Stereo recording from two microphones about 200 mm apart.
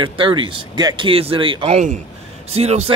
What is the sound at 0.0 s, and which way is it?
A man's voice, 25° right (ahead or behind).